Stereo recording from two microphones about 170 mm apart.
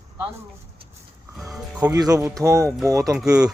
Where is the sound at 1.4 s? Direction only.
5° right (ahead or behind).